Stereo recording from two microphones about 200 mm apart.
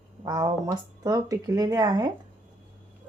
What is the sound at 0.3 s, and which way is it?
Speech, 20° right (ahead or behind).